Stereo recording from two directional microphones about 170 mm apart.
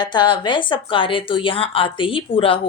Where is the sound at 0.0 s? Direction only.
25° left (ahead or behind).